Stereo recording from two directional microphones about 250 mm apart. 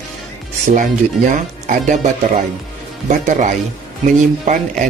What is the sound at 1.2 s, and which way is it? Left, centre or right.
Speech, right.